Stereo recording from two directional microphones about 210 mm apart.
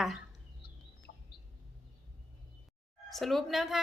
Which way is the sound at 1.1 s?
55° left (ahead or behind).